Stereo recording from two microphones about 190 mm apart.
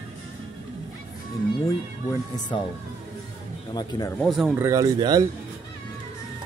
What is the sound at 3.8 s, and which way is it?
Speech, 20° left (ahead or behind).